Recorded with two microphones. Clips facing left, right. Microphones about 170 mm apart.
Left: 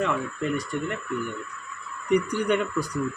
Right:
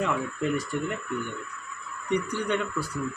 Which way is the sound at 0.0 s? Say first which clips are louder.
Left 1 dB; 5° right (ahead or behind).